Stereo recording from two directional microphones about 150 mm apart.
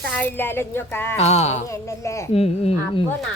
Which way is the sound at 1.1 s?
45° left (ahead or behind).